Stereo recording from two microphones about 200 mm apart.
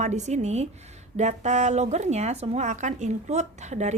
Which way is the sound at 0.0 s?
35° right (ahead or behind).